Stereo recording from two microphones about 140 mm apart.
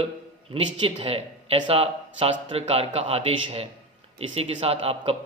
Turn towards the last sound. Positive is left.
turn(degrees=-40)  # may be behind; listen again after turning